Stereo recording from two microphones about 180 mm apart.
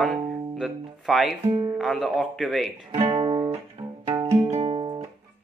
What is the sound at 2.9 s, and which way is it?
Guitar, 30° right (ahead or behind).